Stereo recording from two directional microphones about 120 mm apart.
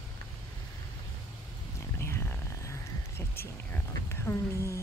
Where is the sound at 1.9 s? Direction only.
20° left (ahead or behind).